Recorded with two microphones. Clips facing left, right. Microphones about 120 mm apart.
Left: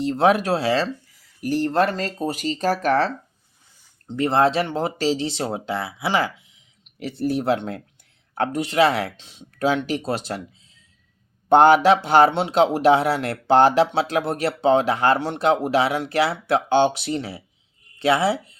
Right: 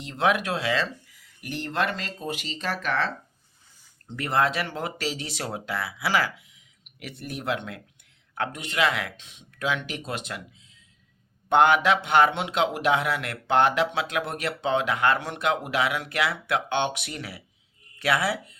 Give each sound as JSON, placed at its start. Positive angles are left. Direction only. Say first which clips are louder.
{"t": 0.0, "sound": "speech", "louder": "left 6 dB", "side_deg": 35}
{"t": 4.0, "sound": "speech", "louder": "left 6 dB", "side_deg": 25}
{"t": 11.4, "sound": "speech", "louder": "left 6 dB", "side_deg": 35}